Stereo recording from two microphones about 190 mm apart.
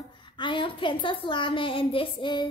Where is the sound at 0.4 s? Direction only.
25° left (ahead or behind).